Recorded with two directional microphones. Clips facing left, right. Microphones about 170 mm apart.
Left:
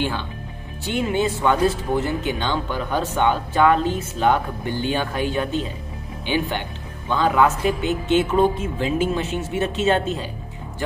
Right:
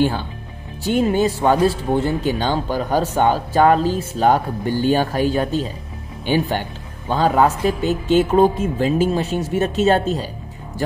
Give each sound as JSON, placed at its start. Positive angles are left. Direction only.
{"t": 0.8, "sound": "speech", "side_deg": -40}